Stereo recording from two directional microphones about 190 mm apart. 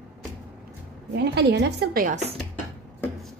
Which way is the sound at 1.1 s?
60° right (ahead or behind).